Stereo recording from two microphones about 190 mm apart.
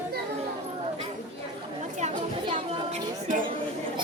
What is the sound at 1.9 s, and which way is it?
Chatter, 35° right (ahead or behind).